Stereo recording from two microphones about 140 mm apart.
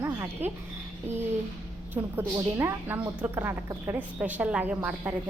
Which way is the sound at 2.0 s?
15° right (ahead or behind).